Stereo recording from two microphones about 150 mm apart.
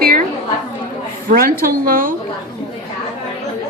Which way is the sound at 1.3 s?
70° right (ahead or behind).